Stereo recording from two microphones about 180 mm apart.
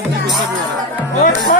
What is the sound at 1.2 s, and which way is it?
Music, 45° left (ahead or behind).